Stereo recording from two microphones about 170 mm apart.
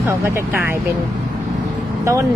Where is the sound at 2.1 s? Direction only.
15° right (ahead or behind).